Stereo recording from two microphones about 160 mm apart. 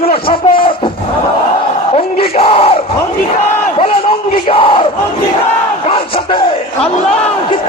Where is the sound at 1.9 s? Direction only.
40° left (ahead or behind).